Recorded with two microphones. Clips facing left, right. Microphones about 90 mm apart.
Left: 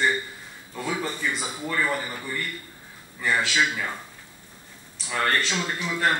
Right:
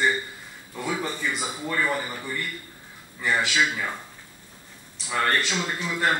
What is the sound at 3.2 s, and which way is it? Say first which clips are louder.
Speech: even; 10° right (ahead or behind).